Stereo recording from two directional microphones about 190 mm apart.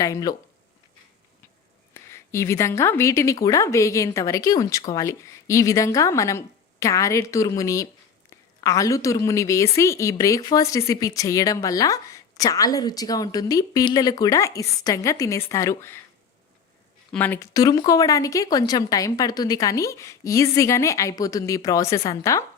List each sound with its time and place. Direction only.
0.0 s speech: 20° left (ahead or behind)
1.9 s a woman's voice: 15° left (ahead or behind)
17.1 s speech: 10° left (ahead or behind)